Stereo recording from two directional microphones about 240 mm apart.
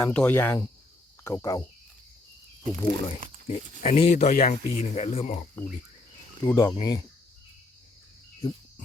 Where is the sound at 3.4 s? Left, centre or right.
Left.